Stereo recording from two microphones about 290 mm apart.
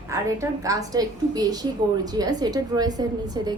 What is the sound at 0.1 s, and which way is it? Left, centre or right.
A woman's voice, centre.